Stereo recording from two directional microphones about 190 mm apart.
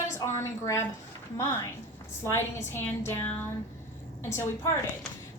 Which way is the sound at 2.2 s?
15° left (ahead or behind).